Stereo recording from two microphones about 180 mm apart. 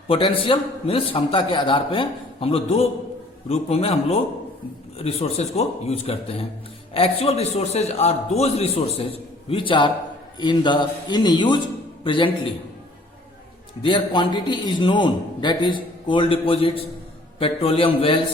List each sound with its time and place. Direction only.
0.1 s a man's voice: 30° left (ahead or behind)
13.8 s a man's voice: 25° left (ahead or behind)